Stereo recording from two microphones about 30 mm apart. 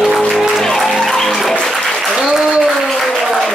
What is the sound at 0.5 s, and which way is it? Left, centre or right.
Music, centre.